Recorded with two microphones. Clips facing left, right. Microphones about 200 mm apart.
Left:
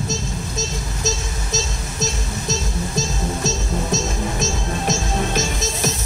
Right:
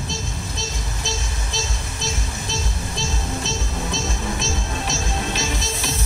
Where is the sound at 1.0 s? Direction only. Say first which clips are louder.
Left 6 dB; 45° left (ahead or behind).